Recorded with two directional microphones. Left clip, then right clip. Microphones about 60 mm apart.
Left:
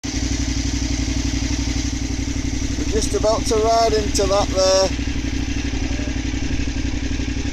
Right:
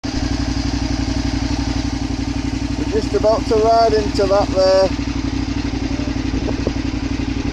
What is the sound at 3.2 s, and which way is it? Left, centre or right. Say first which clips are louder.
Speech: right 4 dB; centre.